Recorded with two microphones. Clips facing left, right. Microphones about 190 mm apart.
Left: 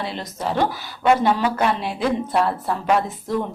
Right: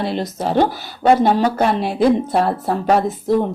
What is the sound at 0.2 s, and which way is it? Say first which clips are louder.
Speech: right 4 dB; 35° right (ahead or behind).